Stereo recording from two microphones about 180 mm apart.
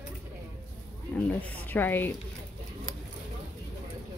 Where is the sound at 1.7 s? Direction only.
10° left (ahead or behind).